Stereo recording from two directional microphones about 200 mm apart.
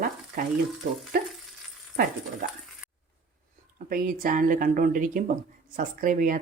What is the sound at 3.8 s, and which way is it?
A woman's voice, 45° right (ahead or behind).